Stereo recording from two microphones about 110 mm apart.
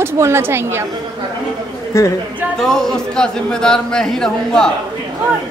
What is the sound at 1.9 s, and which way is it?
Speech, 25° left (ahead or behind).